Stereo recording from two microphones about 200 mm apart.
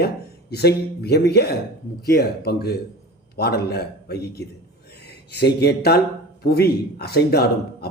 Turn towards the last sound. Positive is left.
turn(degrees=50)  # may be behind; listen again after turning